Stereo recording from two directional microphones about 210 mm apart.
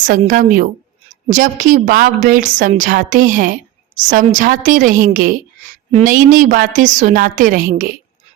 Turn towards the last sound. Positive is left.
turn(degrees=-40)  # may be behind; listen again after turning